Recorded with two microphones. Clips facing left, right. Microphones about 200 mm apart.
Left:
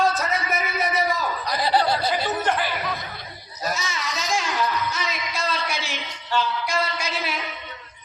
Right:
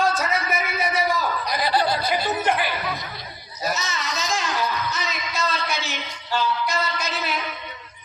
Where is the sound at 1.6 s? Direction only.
30° left (ahead or behind).